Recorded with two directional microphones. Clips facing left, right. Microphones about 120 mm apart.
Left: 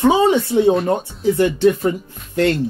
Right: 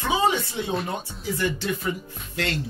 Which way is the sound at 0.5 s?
75° left (ahead or behind).